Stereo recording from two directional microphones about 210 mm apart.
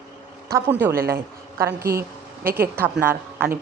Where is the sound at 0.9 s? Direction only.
45° right (ahead or behind).